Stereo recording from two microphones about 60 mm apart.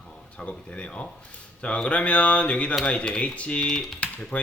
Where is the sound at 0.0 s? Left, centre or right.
Centre.